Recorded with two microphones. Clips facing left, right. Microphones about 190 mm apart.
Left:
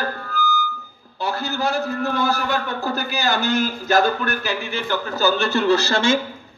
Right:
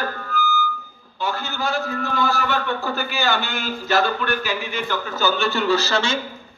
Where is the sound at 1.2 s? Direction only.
35° left (ahead or behind).